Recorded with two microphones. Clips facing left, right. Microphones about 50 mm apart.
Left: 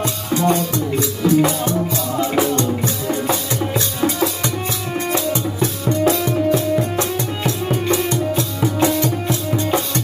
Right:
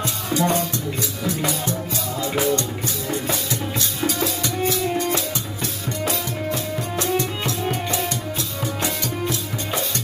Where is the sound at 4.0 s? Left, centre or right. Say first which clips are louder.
Left 4 dB; left.